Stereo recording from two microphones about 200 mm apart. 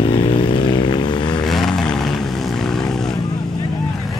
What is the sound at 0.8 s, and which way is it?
Vehicle, 20° left (ahead or behind).